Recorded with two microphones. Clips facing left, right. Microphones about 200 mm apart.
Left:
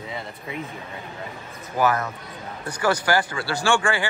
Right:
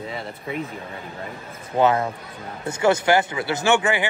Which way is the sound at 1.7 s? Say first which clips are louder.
Right 3 dB; 25° right (ahead or behind).